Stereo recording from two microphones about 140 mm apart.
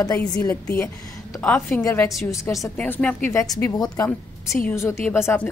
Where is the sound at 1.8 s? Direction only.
20° left (ahead or behind).